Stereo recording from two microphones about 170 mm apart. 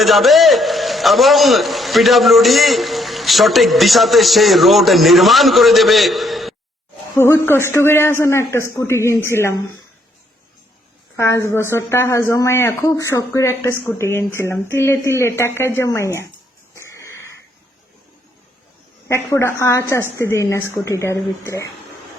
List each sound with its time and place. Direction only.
0.0 s a man's voice: centre (ahead or behind)
7.2 s speech: 15° left (ahead or behind)
11.2 s speech: 15° left (ahead or behind)
16.7 s a sound: 15° left (ahead or behind)
19.0 s speech: 15° left (ahead or behind)